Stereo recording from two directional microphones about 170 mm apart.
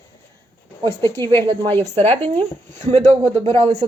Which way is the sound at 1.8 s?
35° right (ahead or behind).